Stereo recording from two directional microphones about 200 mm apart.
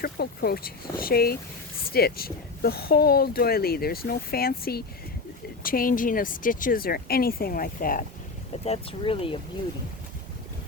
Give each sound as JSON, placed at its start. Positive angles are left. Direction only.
{"t": 0.0, "sound": "speech", "side_deg": 50}
{"t": 8.6, "sound": "speech", "side_deg": 30}